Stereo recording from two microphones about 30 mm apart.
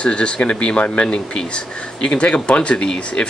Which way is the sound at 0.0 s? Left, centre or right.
Left.